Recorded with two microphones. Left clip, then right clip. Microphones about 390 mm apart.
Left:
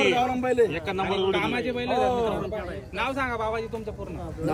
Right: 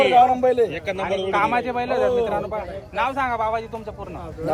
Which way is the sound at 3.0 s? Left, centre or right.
Centre.